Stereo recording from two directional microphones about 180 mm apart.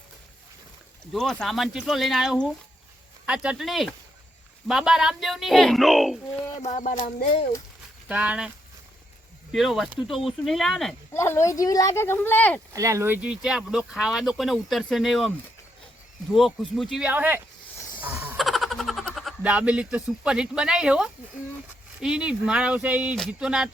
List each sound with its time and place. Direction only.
1.1 s speech: 5° left (ahead or behind)
6.6 s speech: 40° left (ahead or behind)
8.0 s speech: 5° right (ahead or behind)
9.5 s speech: centre (ahead or behind)
11.1 s speech: 15° left (ahead or behind)
12.7 s speech: 15° right (ahead or behind); by 15.3 s centre (ahead or behind)
16.3 s speech: centre (ahead or behind)